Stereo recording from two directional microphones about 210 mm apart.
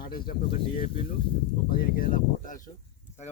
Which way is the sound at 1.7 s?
45° left (ahead or behind).